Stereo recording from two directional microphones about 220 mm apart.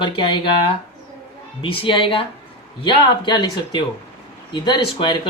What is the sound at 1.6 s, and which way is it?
Speech, 25° left (ahead or behind).